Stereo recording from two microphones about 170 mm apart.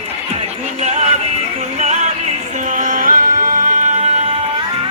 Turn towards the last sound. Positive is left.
turn(degrees=-45)  # may be behind; listen again after turning